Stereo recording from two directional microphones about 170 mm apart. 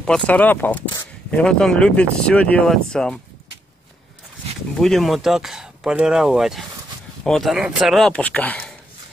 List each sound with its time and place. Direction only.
0.0 s speech: 5° left (ahead or behind)
4.7 s speech: centre (ahead or behind)